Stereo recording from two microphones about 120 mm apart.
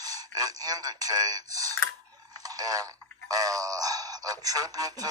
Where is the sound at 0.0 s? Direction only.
30° right (ahead or behind).